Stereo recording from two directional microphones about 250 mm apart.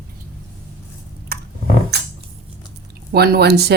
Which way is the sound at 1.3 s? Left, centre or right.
Right.